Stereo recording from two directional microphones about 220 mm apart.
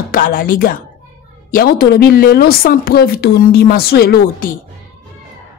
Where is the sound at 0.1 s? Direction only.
40° left (ahead or behind).